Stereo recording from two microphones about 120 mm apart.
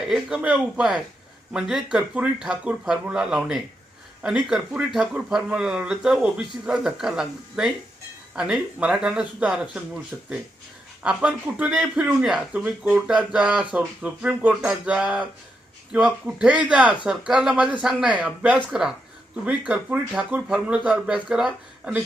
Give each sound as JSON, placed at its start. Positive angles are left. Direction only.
{"t": 0.1, "sound": "speech", "side_deg": -5}